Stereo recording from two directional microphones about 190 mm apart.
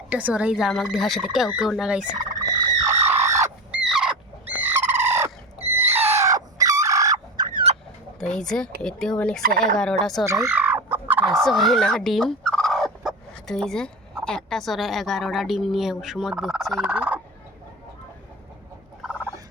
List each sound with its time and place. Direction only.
0.1 s speech: 5° right (ahead or behind)
2.4 s bird: 20° right (ahead or behind)
3.1 s fowl: 15° right (ahead or behind)
3.8 s a sound: 5° right (ahead or behind)
5.9 s fowl: 10° right (ahead or behind); by 7.8 s 30° right (ahead or behind)
8.2 s speech: 5° left (ahead or behind)
9.4 s turkey: 50° right (ahead or behind)
10.0 s speech: centre (ahead or behind)
10.2 s a sound: 15° right (ahead or behind)
11.3 s fowl: centre (ahead or behind)